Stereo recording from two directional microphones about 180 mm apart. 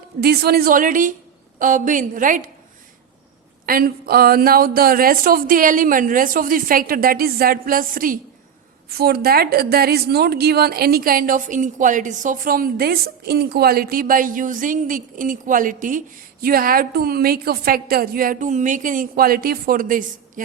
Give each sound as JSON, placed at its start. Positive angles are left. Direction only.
{"t": 0.2, "sound": "speech", "side_deg": -60}
{"t": 3.7, "sound": "a woman's voice", "side_deg": -55}